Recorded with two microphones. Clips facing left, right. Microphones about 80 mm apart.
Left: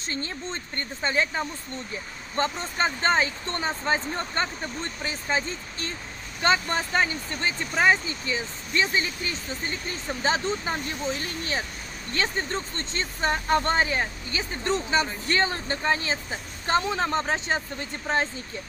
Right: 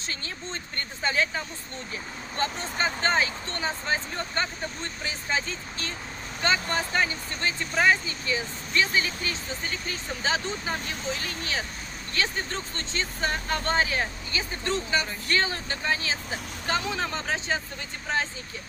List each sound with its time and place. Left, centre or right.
0.1 s speech: left
12.7 s speech: left
13.9 s speech: left